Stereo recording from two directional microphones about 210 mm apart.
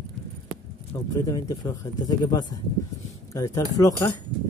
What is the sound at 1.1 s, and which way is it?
Speech, 15° left (ahead or behind).